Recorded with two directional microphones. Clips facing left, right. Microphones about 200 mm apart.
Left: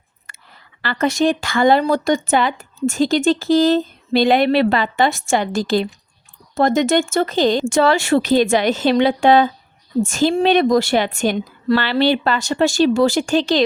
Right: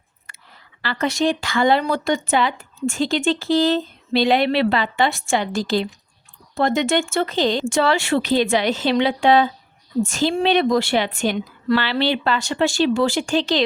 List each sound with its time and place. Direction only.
0.8 s speech: 50° left (ahead or behind)